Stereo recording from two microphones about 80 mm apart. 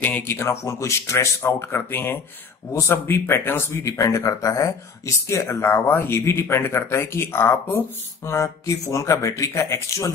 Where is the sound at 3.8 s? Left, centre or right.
Left.